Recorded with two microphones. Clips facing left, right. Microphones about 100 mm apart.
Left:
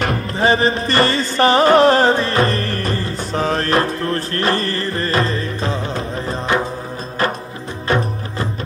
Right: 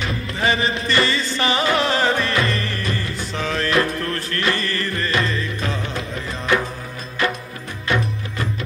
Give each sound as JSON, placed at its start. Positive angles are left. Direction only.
{"t": 0.4, "sound": "music", "side_deg": 35}
{"t": 7.9, "sound": "music", "side_deg": 40}